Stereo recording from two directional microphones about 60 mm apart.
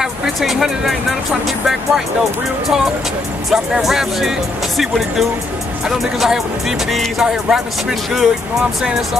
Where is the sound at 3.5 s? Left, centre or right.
Centre.